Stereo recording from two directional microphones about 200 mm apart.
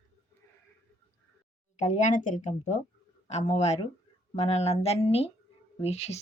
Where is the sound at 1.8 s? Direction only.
35° left (ahead or behind).